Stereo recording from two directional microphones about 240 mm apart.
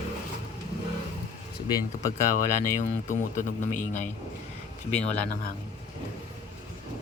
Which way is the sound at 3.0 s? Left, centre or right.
Left.